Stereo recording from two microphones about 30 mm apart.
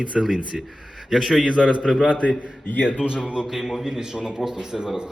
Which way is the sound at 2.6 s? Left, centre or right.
Left.